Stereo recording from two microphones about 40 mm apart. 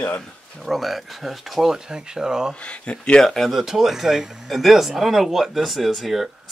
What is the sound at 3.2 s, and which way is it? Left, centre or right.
Speech, centre.